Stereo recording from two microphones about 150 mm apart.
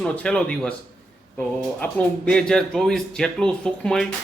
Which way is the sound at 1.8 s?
10° left (ahead or behind).